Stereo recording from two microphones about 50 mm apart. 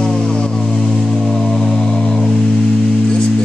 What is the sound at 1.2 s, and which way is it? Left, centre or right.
Music, centre.